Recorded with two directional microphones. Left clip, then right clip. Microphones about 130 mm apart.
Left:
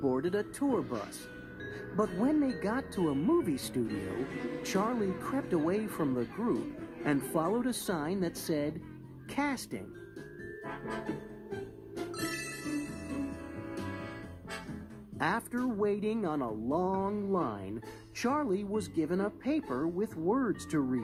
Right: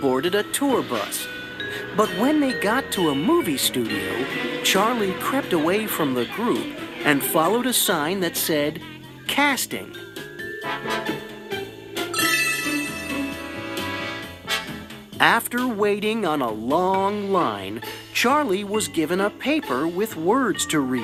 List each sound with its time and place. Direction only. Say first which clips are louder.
0.2 s speech: right 11 dB; 20° right (ahead or behind)
9.3 s speech: right 14 dB; 30° right (ahead or behind)
10.6 s music: right 14 dB; 20° right (ahead or behind)
15.2 s speech: right 14 dB; 35° right (ahead or behind)
15.8 s speech: right 10 dB; 25° right (ahead or behind)
16.5 s a sound: right 12 dB; 45° right (ahead or behind)
17.0 s speech: right 12 dB; 25° right (ahead or behind)
20.2 s speech: right 12 dB; 30° right (ahead or behind)